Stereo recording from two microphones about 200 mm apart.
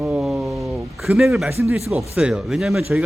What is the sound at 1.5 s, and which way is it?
Speech, 10° right (ahead or behind).